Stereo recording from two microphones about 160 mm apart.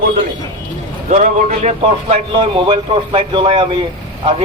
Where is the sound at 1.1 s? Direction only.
50° right (ahead or behind).